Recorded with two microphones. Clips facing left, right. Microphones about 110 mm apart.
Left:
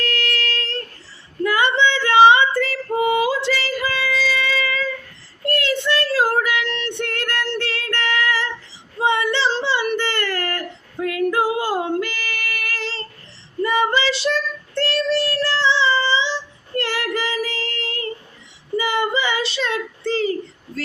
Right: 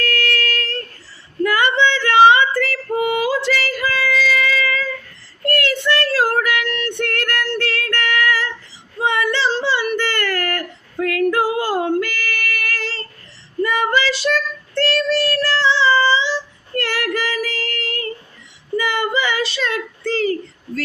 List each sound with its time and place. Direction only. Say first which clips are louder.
0.0 s a sound: right 3 dB; 20° left (ahead or behind)
1.5 s female singing: right 1 dB; 20° left (ahead or behind)
5.5 s child singing: right 1 dB; 20° left (ahead or behind)
10.9 s female singing: right 2 dB; 15° left (ahead or behind)
13.6 s child singing: right 1 dB; 25° left (ahead or behind)